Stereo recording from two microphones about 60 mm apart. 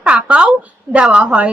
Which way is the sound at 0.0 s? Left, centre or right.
Centre.